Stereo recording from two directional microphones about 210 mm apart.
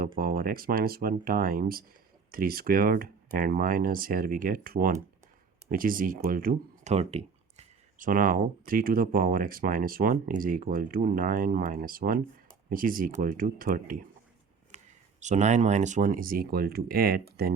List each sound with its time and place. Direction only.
0.2 s speech: 45° right (ahead or behind)
14.7 s a sound: 35° right (ahead or behind)
15.2 s speech: 35° right (ahead or behind)